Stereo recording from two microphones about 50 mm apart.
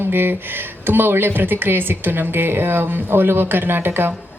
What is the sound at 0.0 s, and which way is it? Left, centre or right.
Speech, right.